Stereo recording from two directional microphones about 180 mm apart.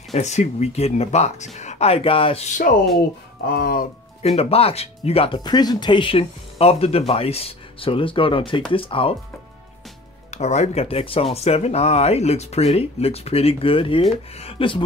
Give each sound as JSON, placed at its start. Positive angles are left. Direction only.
{"t": 0.1, "sound": "speech", "side_deg": 40}
{"t": 2.7, "sound": "speech", "side_deg": 55}
{"t": 4.2, "sound": "speech", "side_deg": 35}
{"t": 10.3, "sound": "speech", "side_deg": 40}